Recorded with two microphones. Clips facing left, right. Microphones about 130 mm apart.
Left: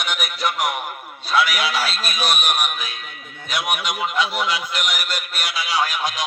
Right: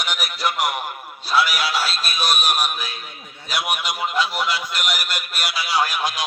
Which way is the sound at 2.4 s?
35° right (ahead or behind).